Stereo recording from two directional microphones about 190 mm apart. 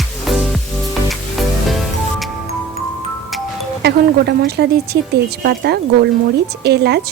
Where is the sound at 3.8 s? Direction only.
60° right (ahead or behind).